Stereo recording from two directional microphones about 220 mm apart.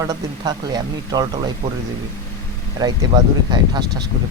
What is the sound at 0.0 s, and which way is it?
Speech, 20° right (ahead or behind).